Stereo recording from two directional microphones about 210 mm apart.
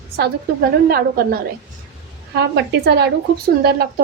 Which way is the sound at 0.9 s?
45° right (ahead or behind).